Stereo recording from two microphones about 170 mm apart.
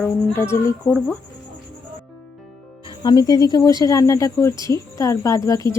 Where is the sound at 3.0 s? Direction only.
25° left (ahead or behind).